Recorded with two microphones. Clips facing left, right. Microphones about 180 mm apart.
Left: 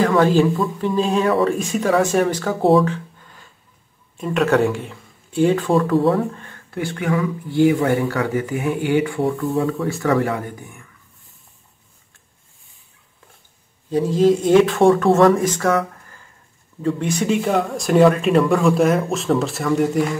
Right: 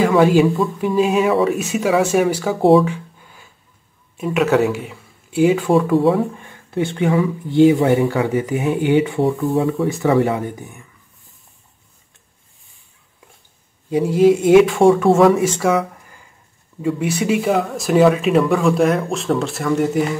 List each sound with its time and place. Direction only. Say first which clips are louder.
0.0 s speech: right 2 dB; 10° right (ahead or behind)
2.9 s a sound: left 1 dB; 10° right (ahead or behind)
4.2 s speech: right 1 dB; 5° right (ahead or behind)
6.3 s speech: right 6 dB; 15° right (ahead or behind)
13.8 s speech: right 2 dB; 10° right (ahead or behind)